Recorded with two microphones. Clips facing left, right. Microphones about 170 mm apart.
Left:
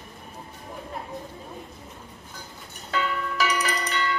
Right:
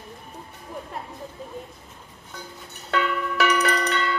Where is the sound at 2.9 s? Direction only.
60° right (ahead or behind).